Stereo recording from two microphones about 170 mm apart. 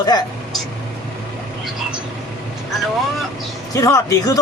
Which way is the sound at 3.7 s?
20° left (ahead or behind).